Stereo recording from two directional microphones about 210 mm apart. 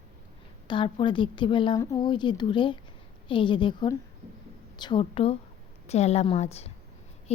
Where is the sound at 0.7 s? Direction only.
20° left (ahead or behind).